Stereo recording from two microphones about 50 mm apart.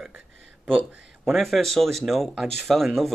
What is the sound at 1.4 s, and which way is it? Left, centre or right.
Speech, centre.